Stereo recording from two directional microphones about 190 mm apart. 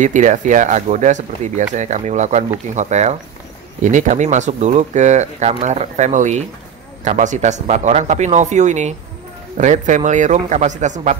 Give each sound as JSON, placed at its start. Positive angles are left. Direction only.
{"t": 0.0, "sound": "speech", "side_deg": -40}